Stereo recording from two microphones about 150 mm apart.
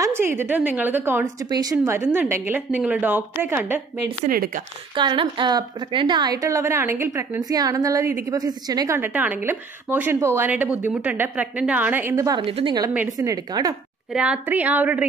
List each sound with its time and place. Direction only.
0.0 s a woman's voice: 15° right (ahead or behind)
1.2 s a woman's voice: 25° right (ahead or behind)
4.3 s speech: 75° right (ahead or behind)
4.9 s a woman's voice: 30° right (ahead or behind)
12.4 s a woman's voice: 35° right (ahead or behind)
14.1 s a woman's voice: 10° right (ahead or behind)